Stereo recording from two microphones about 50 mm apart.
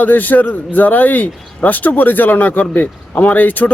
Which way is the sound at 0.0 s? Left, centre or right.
Left.